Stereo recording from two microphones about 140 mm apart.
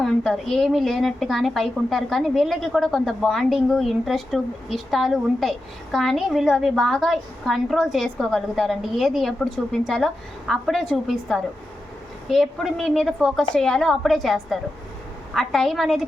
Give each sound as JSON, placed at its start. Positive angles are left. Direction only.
{"t": 0.0, "sound": "a woman's voice", "side_deg": 0}